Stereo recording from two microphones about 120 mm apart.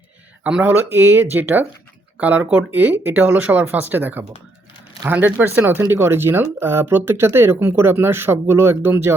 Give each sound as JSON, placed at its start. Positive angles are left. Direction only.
{"t": 0.4, "sound": "speech", "side_deg": -10}